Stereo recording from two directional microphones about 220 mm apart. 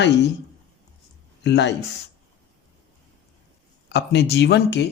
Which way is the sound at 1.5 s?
50° left (ahead or behind).